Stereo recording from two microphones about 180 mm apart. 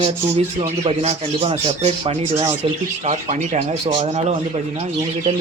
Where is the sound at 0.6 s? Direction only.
35° right (ahead or behind).